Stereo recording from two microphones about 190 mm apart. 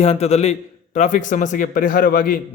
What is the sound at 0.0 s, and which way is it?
A man's voice, 35° left (ahead or behind).